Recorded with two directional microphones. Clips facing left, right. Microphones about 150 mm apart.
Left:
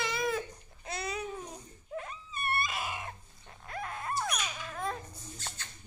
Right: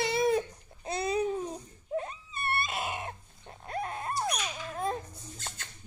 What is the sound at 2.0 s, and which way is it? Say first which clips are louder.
Dog: right 4 dB; 30° right (ahead or behind).